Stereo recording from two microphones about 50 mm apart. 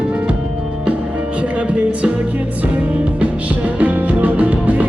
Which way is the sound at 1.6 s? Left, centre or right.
Right.